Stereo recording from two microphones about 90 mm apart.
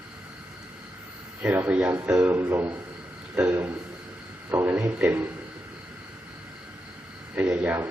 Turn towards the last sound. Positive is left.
turn(degrees=-15)  # may be behind; listen again after turning